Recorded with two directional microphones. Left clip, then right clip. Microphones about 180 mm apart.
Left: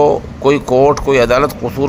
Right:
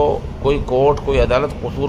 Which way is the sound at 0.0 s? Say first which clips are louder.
Left 6 dB; 25° left (ahead or behind).